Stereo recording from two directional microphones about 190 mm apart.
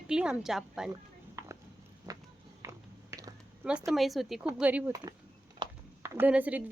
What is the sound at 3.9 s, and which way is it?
Speech, centre (ahead or behind).